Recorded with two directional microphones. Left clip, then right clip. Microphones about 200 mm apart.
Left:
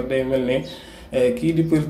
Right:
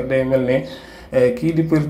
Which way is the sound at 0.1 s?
10° right (ahead or behind).